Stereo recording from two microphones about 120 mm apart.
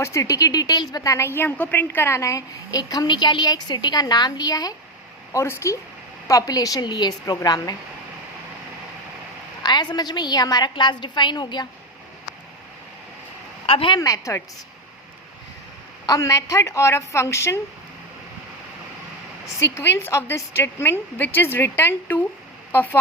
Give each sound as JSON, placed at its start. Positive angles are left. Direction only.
{"t": 0.0, "sound": "a woman's voice", "side_deg": 25}
{"t": 9.6, "sound": "a woman's voice", "side_deg": 35}
{"t": 13.7, "sound": "speech", "side_deg": 50}
{"t": 13.9, "sound": "a woman's voice", "side_deg": 30}
{"t": 16.0, "sound": "a woman's voice", "side_deg": 30}
{"t": 19.5, "sound": "a woman's voice", "side_deg": 20}